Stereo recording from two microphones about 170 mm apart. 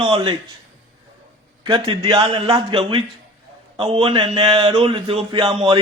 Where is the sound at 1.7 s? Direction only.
30° right (ahead or behind).